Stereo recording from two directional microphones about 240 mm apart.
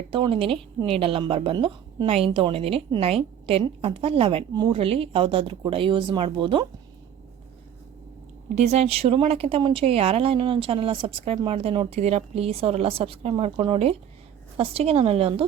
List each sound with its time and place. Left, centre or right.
0.1 s speech: right
8.5 s speech: right